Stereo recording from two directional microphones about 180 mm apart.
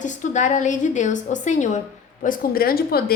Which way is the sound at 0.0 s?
45° left (ahead or behind).